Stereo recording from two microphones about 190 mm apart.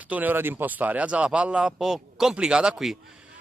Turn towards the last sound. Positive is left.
turn(degrees=0)  # may be behind; listen again after turning